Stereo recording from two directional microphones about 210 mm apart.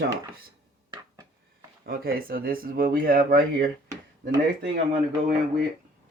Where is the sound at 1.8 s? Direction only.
45° right (ahead or behind).